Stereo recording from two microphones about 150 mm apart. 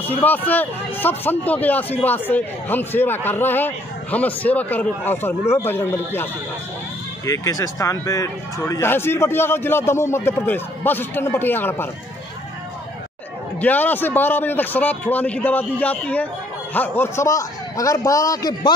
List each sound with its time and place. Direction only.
0.2 s a man's voice: 10° left (ahead or behind)
7.2 s a man's voice: 20° left (ahead or behind)
13.6 s a man's voice: 10° left (ahead or behind)